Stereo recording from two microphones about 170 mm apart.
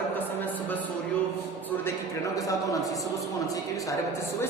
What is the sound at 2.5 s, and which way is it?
Speech, 20° left (ahead or behind).